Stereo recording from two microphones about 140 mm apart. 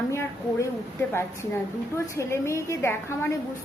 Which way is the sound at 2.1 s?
20° left (ahead or behind).